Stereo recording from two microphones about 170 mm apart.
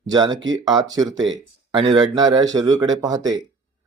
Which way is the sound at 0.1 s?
25° right (ahead or behind).